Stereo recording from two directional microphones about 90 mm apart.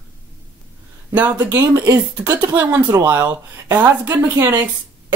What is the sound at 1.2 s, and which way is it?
Speech, 20° right (ahead or behind).